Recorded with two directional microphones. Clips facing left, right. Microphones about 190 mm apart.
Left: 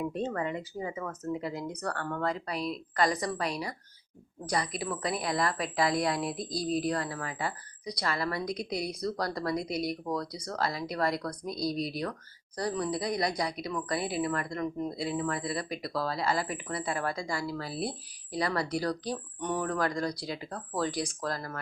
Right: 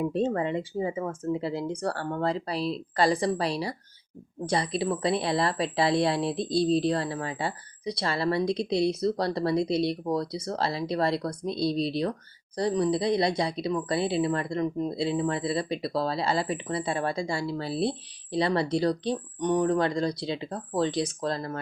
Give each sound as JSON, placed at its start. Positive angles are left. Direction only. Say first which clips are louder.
{"t": 0.0, "sound": "speech", "louder": "right 6 dB", "side_deg": -30}